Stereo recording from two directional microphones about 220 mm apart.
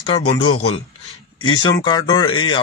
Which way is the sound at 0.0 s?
25° left (ahead or behind).